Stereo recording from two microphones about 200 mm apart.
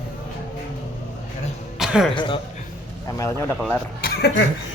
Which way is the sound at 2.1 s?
25° left (ahead or behind).